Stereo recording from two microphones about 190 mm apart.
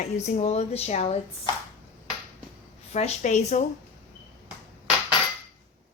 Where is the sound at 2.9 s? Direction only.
40° left (ahead or behind).